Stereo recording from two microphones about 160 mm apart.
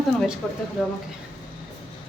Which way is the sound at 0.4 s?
Centre (ahead or behind).